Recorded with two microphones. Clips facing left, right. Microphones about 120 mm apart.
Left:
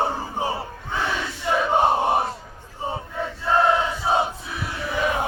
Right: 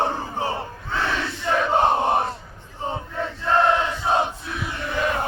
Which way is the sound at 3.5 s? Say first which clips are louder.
Even; 5° left (ahead or behind).